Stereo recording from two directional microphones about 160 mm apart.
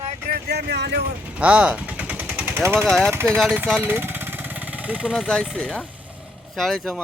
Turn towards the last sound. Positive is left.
turn(degrees=0)  # may be behind; listen again after turning